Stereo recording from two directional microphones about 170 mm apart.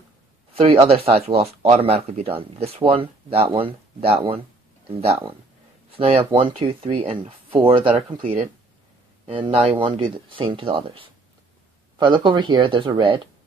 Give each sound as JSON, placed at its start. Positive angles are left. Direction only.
{"t": 0.8, "sound": "speech", "side_deg": -35}
{"t": 9.2, "sound": "speech", "side_deg": -30}